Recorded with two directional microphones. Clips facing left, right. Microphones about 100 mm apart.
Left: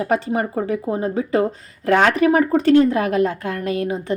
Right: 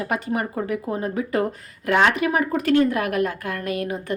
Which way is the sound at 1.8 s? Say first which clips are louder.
Left 4 dB; 40° left (ahead or behind).